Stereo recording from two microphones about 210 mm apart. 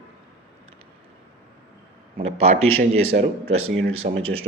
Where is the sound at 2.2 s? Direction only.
30° right (ahead or behind).